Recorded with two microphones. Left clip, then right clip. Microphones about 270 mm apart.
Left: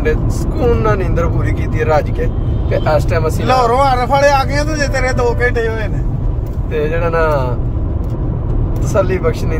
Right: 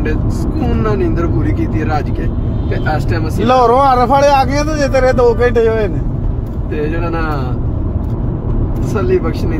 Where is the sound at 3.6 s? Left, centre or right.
Right.